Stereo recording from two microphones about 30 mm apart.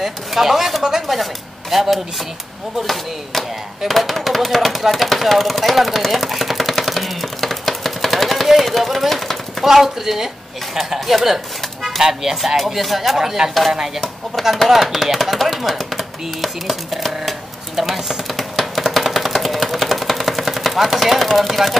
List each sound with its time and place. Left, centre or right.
0.0 s a man's voice: centre
9.1 s a sound: centre
9.7 s a man's voice: centre
11.2 s a sound: centre
12.0 s a man's voice: centre
13.2 s a man's voice: centre
14.7 s speech: centre
18.3 s a sound: centre
21.4 s speech: centre